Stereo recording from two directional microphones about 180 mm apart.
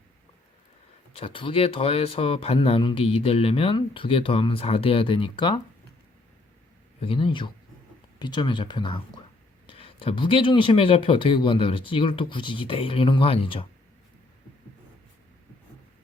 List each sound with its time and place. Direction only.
1.1 s speech: 30° left (ahead or behind)
7.0 s speech: 30° left (ahead or behind)